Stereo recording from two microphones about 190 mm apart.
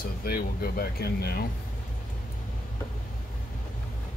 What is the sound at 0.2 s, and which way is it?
Speech, 50° left (ahead or behind).